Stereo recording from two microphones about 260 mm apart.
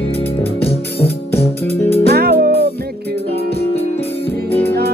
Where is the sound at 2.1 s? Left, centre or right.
Right.